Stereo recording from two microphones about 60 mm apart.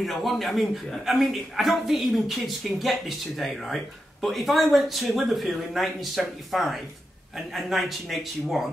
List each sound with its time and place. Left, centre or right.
0.0 s a woman's voice: centre